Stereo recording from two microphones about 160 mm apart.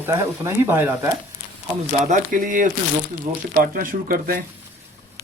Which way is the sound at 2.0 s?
55° right (ahead or behind).